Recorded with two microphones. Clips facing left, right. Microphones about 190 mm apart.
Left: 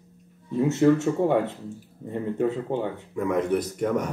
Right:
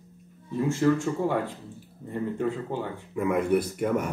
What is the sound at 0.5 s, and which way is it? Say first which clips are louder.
Speech: left 4 dB; 20° left (ahead or behind).